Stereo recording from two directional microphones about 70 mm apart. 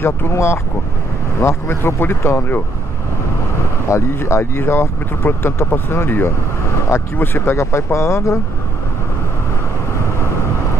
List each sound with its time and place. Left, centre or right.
0.0 s speech: left
3.9 s speech: left